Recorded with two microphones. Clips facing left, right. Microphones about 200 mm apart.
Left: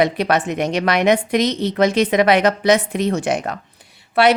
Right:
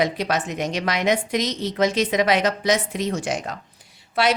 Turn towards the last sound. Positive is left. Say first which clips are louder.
# left 6 dB
turn(degrees=60)  # may be behind; listen again after turning